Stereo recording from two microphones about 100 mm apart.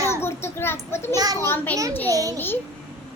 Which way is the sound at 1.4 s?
20° left (ahead or behind).